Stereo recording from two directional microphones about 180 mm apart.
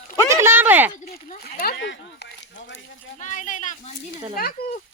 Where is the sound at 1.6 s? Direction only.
75° left (ahead or behind).